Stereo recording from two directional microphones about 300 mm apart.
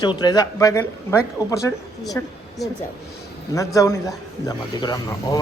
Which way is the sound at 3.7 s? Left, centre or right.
Centre.